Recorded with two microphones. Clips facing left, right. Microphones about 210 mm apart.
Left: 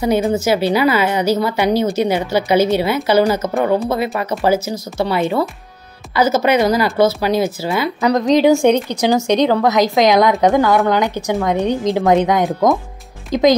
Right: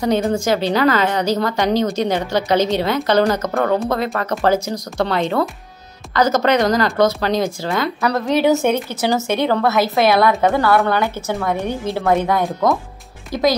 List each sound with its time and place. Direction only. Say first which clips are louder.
0.0 s speech: left 2 dB; 10° left (ahead or behind)